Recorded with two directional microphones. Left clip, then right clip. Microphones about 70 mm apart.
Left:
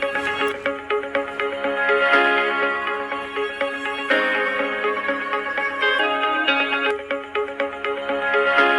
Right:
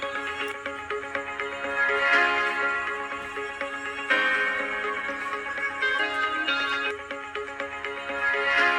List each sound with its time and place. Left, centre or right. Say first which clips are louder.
0.0 s music: left 8 dB; left
1.1 s music: left 7 dB; left
4.1 s music: left 3 dB; left
6.2 s music: left 6 dB; left
8.1 s music: left 5 dB; left